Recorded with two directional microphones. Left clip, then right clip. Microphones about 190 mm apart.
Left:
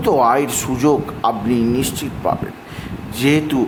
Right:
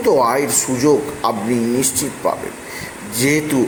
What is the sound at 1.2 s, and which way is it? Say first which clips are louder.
Speech: left 1 dB; 5° left (ahead or behind).